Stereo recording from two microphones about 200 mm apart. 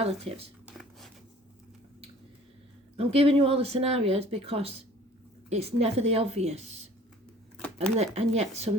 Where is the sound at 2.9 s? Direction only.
30° right (ahead or behind).